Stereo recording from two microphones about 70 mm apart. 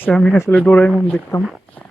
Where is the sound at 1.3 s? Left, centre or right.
Left.